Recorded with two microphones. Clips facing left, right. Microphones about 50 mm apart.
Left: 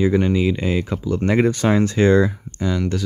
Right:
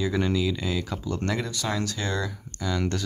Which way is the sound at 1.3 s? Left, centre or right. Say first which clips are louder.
Left 16 dB; left.